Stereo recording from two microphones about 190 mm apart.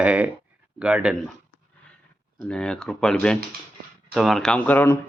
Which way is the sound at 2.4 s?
5° left (ahead or behind).